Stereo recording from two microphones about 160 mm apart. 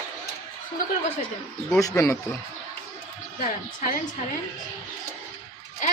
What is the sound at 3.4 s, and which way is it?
Speech, 60° left (ahead or behind).